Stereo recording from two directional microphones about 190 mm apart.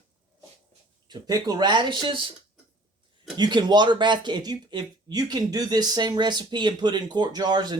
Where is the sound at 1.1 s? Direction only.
20° right (ahead or behind).